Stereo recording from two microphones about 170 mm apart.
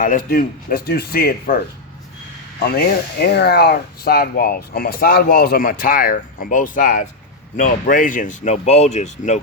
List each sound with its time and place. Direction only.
0.0 s speech: 55° left (ahead or behind)
2.6 s speech: 65° left (ahead or behind); by 9.4 s 45° left (ahead or behind)